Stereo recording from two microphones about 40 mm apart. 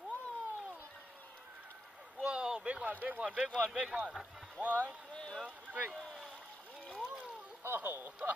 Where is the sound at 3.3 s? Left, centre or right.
Right.